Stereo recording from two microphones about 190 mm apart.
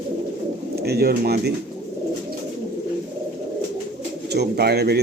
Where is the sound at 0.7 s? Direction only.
60° right (ahead or behind).